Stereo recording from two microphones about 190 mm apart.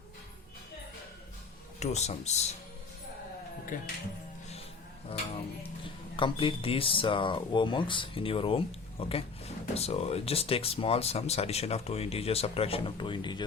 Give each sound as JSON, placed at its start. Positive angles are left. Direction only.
{"t": 1.8, "sound": "speech", "side_deg": 35}
{"t": 3.7, "sound": "speech", "side_deg": 45}
{"t": 6.1, "sound": "speech", "side_deg": 25}